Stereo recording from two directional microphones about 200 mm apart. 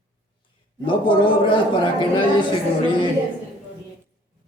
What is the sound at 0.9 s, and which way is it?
Speech, 25° left (ahead or behind).